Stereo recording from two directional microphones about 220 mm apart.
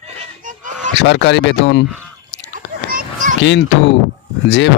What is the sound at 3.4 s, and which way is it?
Speech, 55° left (ahead or behind).